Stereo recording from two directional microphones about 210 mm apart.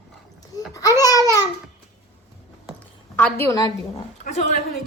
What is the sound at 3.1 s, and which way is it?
Speech, 10° left (ahead or behind).